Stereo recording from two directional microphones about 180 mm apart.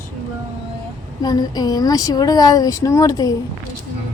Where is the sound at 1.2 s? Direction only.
20° left (ahead or behind).